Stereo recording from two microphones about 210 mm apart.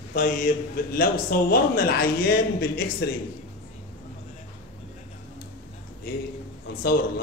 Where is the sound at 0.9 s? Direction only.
45° left (ahead or behind).